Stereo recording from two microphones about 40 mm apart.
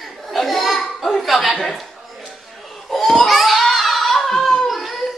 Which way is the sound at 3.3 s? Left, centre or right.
Centre.